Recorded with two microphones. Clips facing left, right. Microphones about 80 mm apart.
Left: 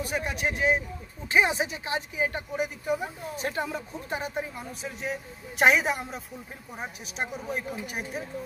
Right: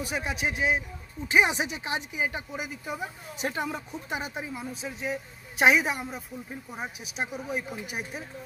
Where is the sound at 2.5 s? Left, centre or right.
Centre.